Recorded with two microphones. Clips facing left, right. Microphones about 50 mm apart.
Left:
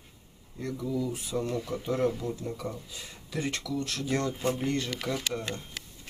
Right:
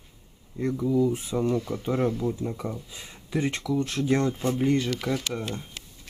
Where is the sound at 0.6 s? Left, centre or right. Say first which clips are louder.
Right 8 dB; right.